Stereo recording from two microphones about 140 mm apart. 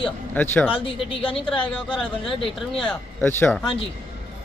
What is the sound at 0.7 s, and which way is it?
Speech, 40° left (ahead or behind).